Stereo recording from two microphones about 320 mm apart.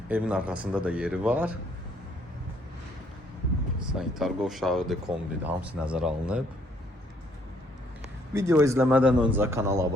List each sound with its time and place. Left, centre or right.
0.1 s speech: centre
3.9 s speech: centre
8.3 s a man's voice: centre